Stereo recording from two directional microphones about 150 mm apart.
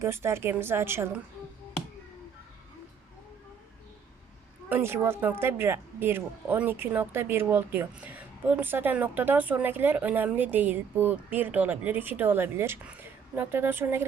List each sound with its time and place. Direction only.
0.0 s speech: 15° right (ahead or behind)
4.7 s speech: 15° right (ahead or behind)